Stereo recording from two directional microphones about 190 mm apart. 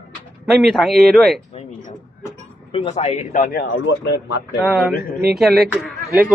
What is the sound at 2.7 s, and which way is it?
Speech, 30° left (ahead or behind).